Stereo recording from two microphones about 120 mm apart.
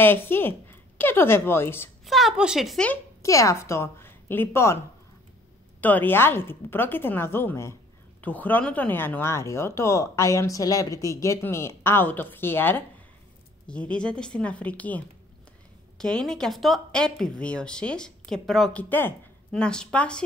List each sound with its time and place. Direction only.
0.0 s speech: 20° left (ahead or behind)
2.0 s a woman's voice: centre (ahead or behind)
3.2 s a woman's voice: 25° left (ahead or behind)
5.8 s speech: 15° left (ahead or behind)
18.8 s speech: 15° left (ahead or behind)